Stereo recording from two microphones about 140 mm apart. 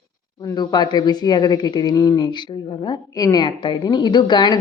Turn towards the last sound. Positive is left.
turn(degrees=30)  # may be behind; listen again after turning